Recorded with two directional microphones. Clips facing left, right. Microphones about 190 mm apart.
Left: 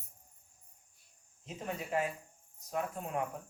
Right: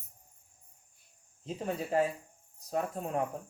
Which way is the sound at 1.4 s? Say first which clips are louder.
Right 5 dB; 35° right (ahead or behind).